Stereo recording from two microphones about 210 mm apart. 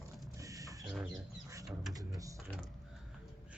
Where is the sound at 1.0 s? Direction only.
15° right (ahead or behind).